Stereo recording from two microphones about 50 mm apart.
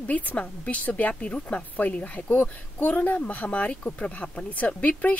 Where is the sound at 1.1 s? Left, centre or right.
Left.